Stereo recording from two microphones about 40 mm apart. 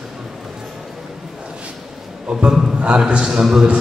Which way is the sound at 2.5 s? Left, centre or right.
Centre.